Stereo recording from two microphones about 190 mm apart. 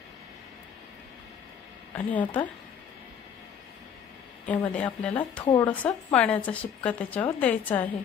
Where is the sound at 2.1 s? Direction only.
10° left (ahead or behind).